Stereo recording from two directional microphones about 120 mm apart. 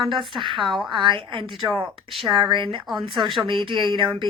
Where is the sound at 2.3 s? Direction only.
45° right (ahead or behind).